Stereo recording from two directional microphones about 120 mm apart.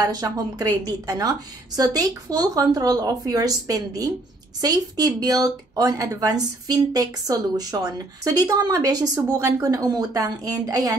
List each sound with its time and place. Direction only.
0.0 s speech: 30° right (ahead or behind)